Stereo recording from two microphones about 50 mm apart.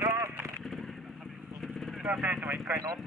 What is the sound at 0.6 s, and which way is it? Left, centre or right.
Vehicle, centre.